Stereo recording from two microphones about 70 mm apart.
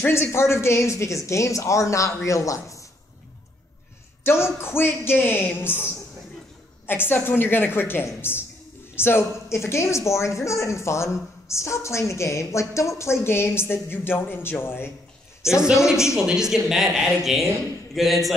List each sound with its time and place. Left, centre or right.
0.0 s speech: left
4.2 s speech: left
6.9 s speech: left
15.6 s a woman's voice: centre